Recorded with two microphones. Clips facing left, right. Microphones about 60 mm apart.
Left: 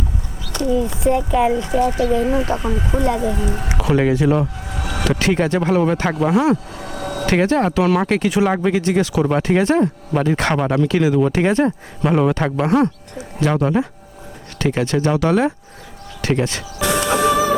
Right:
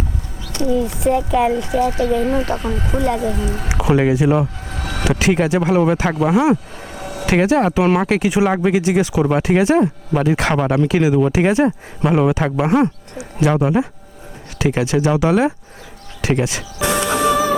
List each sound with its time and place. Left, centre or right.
1.3 s speech: centre
3.2 s speech: centre
3.7 s a sound: centre
3.9 s speech: centre
4.7 s vehicle: centre
5.0 s speech: centre
6.8 s a sound: left
7.3 s speech: centre
10.8 s speech: centre
12.6 s speech: centre
13.1 s speech: centre
16.8 s music: right
17.2 s music: centre